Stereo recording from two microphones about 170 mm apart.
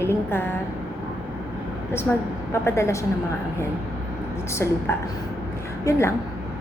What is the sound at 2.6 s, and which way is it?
Speech, 15° left (ahead or behind).